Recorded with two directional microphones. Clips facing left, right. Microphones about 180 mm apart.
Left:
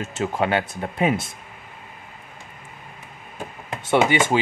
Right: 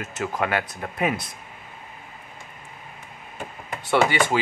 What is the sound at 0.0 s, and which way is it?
Speech, 30° left (ahead or behind).